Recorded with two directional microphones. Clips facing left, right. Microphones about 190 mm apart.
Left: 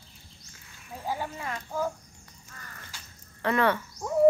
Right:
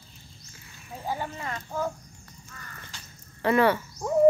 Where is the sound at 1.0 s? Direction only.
10° left (ahead or behind).